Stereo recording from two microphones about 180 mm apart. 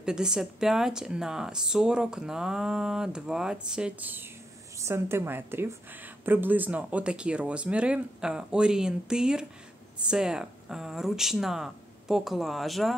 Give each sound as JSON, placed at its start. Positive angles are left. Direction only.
{"t": 0.0, "sound": "a woman's voice", "side_deg": -5}